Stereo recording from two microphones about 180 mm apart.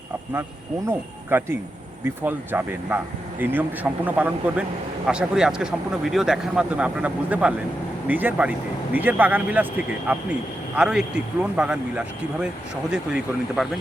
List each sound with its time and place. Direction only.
0.9 s speech: 15° right (ahead or behind)
13.6 s speech: 5° right (ahead or behind)